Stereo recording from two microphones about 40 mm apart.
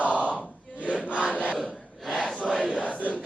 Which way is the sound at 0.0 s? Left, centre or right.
Right.